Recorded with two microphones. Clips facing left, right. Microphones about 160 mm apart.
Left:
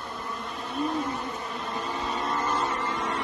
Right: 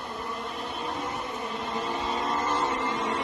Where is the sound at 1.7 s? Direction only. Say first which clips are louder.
Right 1 dB; 25° right (ahead or behind).